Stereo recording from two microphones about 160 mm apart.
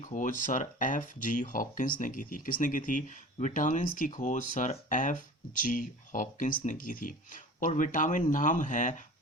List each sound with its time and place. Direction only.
0.0 s speech: 55° left (ahead or behind)